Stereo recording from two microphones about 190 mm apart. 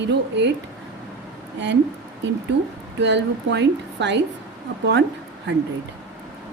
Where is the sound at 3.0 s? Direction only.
65° right (ahead or behind).